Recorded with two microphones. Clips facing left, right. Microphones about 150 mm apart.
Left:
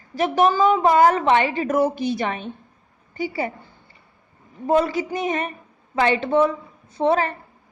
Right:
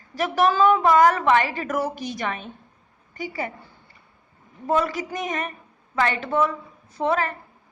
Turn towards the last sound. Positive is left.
turn(degrees=30)  # may be behind; listen again after turning